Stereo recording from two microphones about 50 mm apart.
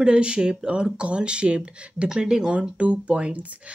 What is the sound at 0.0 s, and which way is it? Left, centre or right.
Speech, centre.